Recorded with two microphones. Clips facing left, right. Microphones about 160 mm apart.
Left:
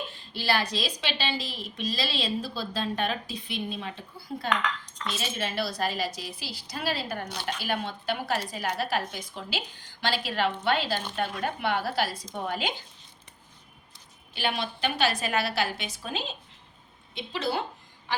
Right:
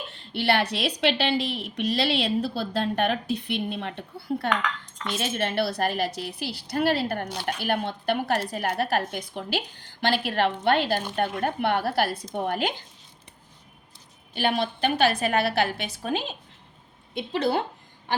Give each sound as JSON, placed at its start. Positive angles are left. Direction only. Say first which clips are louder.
{"t": 0.1, "sound": "a woman's voice", "louder": "right 6 dB", "side_deg": -65}
{"t": 14.3, "sound": "a woman's voice", "louder": "right 5 dB", "side_deg": -50}